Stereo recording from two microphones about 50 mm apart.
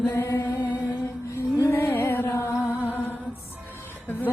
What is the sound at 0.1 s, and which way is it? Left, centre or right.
Music, left.